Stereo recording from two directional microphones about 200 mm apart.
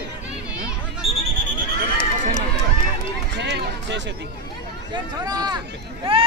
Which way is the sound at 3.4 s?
60° right (ahead or behind).